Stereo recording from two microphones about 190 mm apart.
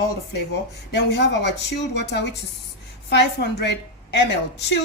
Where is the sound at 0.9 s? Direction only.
65° left (ahead or behind).